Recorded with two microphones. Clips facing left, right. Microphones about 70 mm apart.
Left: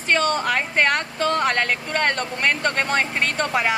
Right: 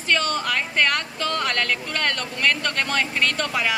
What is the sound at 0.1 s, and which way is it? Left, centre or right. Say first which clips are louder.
Speech: left 3 dB; left.